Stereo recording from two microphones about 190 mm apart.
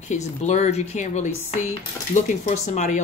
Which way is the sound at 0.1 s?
35° left (ahead or behind).